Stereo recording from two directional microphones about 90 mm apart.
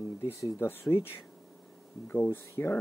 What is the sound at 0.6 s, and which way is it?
Speech, 25° left (ahead or behind).